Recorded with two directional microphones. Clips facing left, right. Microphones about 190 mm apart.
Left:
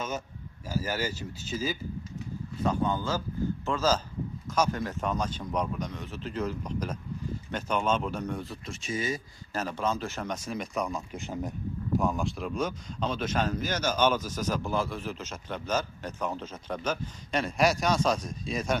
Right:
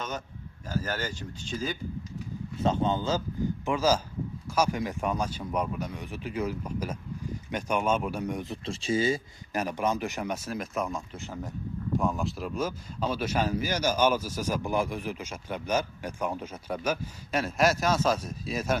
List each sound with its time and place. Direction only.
0.7 s speech: 10° left (ahead or behind)
2.6 s speech: 25° right (ahead or behind)
8.6 s speech: 30° right (ahead or behind)
9.5 s speech: 15° right (ahead or behind)
11.1 s speech: 15° left (ahead or behind)
11.9 s speech: centre (ahead or behind)